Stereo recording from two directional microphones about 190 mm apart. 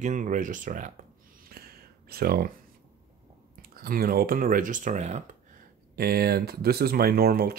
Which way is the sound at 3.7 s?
50° right (ahead or behind).